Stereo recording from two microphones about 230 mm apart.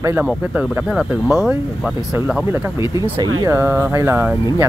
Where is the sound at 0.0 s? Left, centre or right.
Centre.